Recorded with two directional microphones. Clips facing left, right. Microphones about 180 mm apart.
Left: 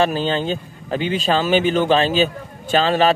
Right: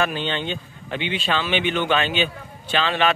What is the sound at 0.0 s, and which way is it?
A man's voice, 35° left (ahead or behind).